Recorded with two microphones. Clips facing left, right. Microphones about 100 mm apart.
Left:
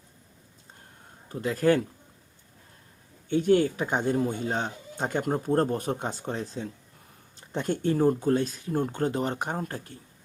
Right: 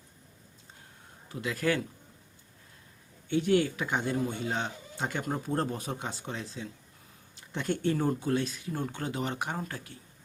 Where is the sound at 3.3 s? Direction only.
40° left (ahead or behind).